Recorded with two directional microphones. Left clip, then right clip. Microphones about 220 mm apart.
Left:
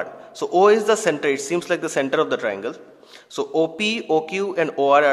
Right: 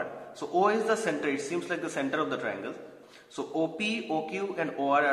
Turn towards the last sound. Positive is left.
turn(degrees=45)  # may be behind; listen again after turning